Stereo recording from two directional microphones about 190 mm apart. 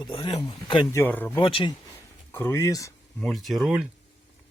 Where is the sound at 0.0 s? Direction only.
25° left (ahead or behind).